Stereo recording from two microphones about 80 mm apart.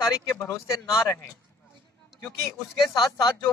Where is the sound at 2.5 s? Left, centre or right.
Left.